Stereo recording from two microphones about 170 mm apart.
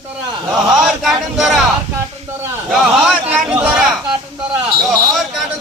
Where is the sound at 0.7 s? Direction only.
Centre (ahead or behind).